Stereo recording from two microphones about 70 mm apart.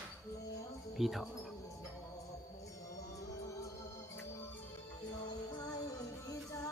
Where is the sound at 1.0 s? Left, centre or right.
Centre.